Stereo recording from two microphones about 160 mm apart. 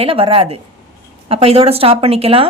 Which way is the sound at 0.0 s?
35° right (ahead or behind).